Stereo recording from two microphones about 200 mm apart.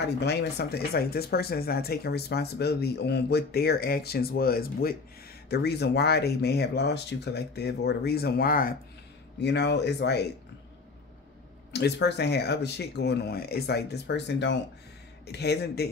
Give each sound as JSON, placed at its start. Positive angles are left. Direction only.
{"t": 0.2, "sound": "speech", "side_deg": 55}
{"t": 9.4, "sound": "speech", "side_deg": 60}
{"t": 11.7, "sound": "speech", "side_deg": 55}